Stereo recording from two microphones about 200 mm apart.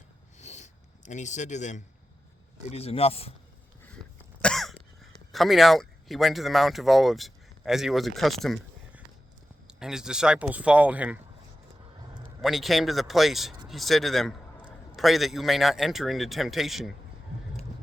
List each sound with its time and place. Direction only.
0.3 s rub: 35° left (ahead or behind)
2.6 s speech: 30° left (ahead or behind)
4.4 s cough: centre (ahead or behind)
5.3 s speech: centre (ahead or behind)
12.4 s a man's voice: centre (ahead or behind)